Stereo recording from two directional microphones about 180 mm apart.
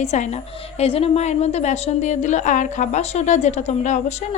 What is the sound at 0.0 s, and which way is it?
A woman's voice, 40° left (ahead or behind).